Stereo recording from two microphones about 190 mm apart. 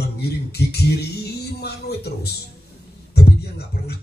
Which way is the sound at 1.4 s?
60° left (ahead or behind).